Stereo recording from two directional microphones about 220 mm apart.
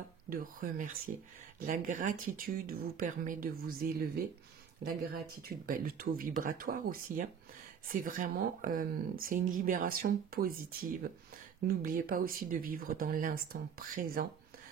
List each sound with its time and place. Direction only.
0.3 s speech: 40° right (ahead or behind)